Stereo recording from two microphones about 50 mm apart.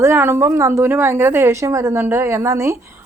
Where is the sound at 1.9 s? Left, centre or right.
Right.